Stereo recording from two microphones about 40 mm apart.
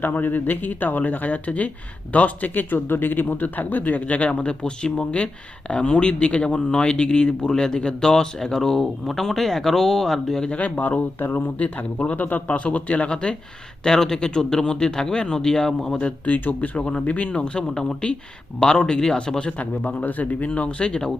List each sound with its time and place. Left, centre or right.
0.0 s speech: left
2.6 s speech: left; by 10.4 s centre
10.6 s speech: left
13.8 s speech: centre
16.0 s speech: left
16.4 s speech: left
16.7 s speech: left
19.5 s speech: left
20.5 s speech: left